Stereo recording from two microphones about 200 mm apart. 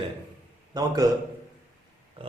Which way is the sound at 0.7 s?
20° right (ahead or behind).